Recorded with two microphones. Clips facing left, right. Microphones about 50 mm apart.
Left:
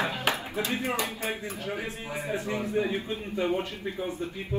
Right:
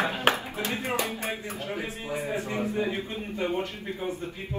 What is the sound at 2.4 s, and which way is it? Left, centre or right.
A man's voice, right.